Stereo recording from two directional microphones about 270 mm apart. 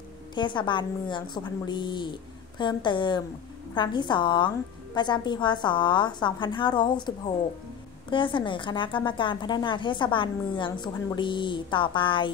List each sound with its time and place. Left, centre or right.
0.3 s a woman's voice: centre